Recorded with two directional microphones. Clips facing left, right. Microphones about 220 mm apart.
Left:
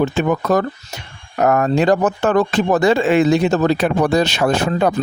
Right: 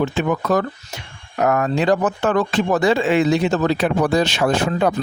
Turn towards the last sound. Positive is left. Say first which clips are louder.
# left 2 dB
turn(degrees=40)  # may be behind; listen again after turning